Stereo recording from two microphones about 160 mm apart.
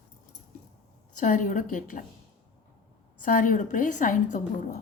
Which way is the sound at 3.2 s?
55° left (ahead or behind).